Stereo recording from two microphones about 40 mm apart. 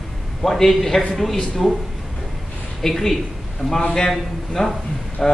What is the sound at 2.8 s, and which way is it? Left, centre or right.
A man's voice, centre.